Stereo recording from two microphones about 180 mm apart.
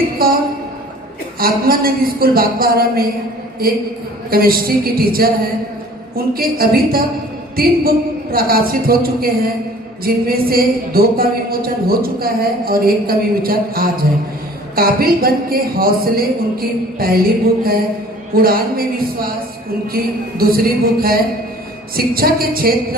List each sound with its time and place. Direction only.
0.2 s a sound: 55° right (ahead or behind)
1.4 s speech: 55° right (ahead or behind)
4.3 s speech: 55° right (ahead or behind)
20.4 s speech: 55° right (ahead or behind)